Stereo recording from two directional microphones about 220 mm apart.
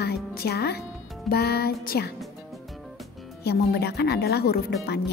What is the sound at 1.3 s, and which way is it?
Speech, 45° left (ahead or behind).